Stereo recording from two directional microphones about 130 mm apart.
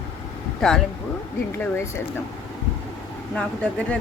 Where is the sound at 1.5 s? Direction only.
15° left (ahead or behind).